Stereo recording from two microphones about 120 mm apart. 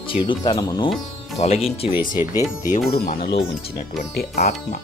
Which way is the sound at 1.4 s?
60° left (ahead or behind).